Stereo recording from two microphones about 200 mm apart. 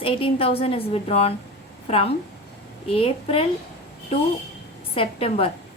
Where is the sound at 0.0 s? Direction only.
25° left (ahead or behind).